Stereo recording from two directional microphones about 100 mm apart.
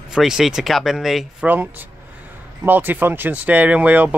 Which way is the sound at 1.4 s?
15° right (ahead or behind).